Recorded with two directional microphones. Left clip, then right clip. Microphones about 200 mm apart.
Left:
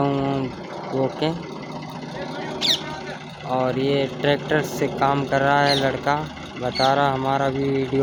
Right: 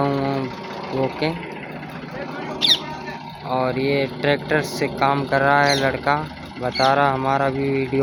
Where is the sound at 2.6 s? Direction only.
25° right (ahead or behind).